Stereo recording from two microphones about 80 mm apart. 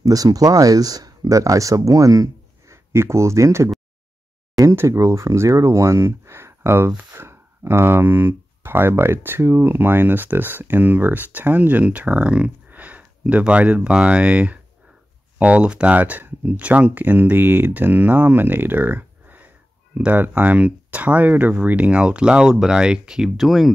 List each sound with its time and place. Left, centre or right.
0.0 s speech: right; by 23.7 s centre